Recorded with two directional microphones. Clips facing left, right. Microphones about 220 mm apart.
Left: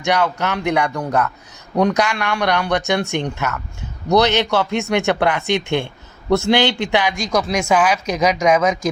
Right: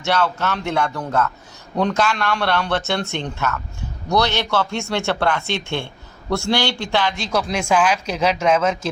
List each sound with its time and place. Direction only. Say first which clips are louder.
0.0 s a man's voice: left 2 dB; 15° left (ahead or behind)